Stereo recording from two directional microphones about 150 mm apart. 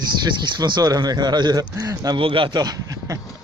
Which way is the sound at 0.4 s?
30° right (ahead or behind).